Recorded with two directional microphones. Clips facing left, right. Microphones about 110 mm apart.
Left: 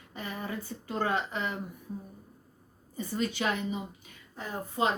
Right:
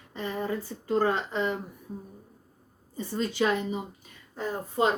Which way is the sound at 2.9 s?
30° right (ahead or behind).